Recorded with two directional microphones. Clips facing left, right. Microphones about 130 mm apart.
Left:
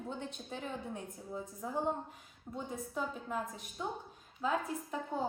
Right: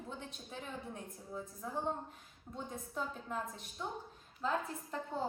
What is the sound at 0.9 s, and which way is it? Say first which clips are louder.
Speech: left 3 dB; 25° left (ahead or behind).